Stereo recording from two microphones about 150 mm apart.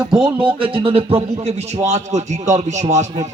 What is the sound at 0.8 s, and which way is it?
A man's voice, 40° right (ahead or behind).